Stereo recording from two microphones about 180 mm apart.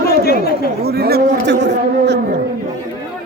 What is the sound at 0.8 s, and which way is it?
A man's voice, 60° right (ahead or behind).